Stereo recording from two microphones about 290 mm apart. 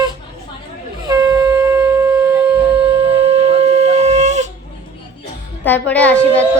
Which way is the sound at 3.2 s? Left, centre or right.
Right.